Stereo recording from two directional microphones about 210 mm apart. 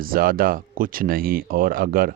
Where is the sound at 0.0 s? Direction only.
45° right (ahead or behind).